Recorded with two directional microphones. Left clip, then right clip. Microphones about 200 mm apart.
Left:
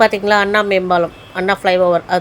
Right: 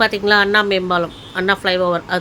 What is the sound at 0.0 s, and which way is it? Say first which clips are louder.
Speech: left 2 dB; 15° left (ahead or behind).